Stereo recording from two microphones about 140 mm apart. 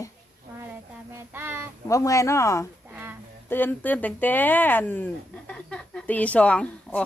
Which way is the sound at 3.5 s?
15° left (ahead or behind).